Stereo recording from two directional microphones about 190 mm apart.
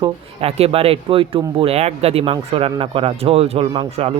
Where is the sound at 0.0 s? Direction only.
30° right (ahead or behind).